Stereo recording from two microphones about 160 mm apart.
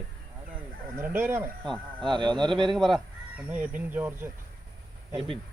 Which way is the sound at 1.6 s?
Centre (ahead or behind).